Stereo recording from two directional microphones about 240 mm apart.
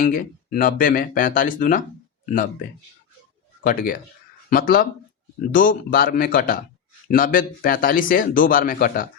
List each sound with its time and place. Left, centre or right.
0.0 s speech: left
3.6 s speech: left